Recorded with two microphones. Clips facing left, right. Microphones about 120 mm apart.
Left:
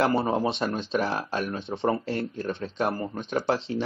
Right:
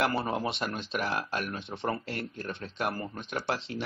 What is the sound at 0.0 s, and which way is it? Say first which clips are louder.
Speech: left 5 dB; 30° left (ahead or behind).